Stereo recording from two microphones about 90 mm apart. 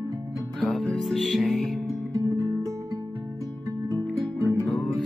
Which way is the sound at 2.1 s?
35° right (ahead or behind).